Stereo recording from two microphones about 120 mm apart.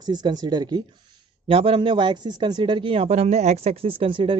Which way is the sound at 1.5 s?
50° right (ahead or behind).